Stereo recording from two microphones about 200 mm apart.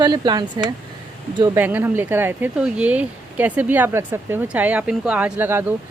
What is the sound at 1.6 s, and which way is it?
Speech, 10° right (ahead or behind).